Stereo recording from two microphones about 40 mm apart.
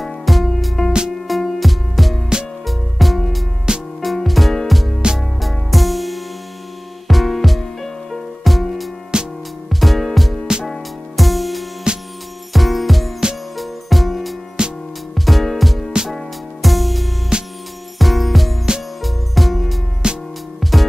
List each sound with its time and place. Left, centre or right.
0.0 s music: centre
3.7 s music: right
4.0 s music: centre
9.1 s music: right
9.7 s music: centre
11.9 s music: right
12.5 s music: centre
14.6 s music: centre
15.1 s music: centre
17.3 s music: right
17.9 s music: centre
20.0 s music: right
20.6 s music: centre